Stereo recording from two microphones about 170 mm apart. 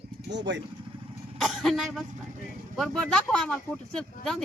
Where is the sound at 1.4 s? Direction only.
Centre (ahead or behind).